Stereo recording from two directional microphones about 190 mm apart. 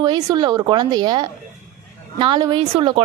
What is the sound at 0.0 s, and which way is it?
Speech, 20° right (ahead or behind).